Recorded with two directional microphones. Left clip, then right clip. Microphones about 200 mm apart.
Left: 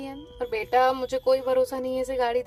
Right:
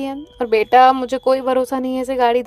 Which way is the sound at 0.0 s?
45° right (ahead or behind).